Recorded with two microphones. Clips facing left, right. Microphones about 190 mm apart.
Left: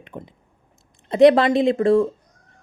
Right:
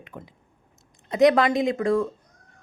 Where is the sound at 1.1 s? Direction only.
30° left (ahead or behind).